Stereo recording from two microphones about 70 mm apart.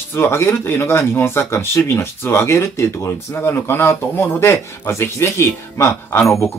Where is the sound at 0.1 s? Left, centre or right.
Left.